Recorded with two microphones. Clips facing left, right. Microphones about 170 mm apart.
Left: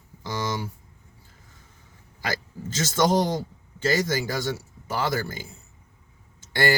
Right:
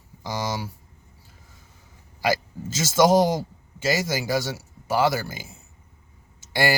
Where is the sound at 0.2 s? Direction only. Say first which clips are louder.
Right 1 dB; 10° right (ahead or behind).